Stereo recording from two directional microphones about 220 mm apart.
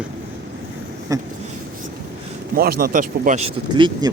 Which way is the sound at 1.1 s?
15° right (ahead or behind).